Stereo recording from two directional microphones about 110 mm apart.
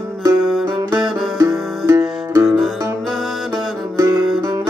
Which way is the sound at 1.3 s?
25° right (ahead or behind).